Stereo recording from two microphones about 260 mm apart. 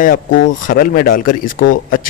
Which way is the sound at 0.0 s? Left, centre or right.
Left.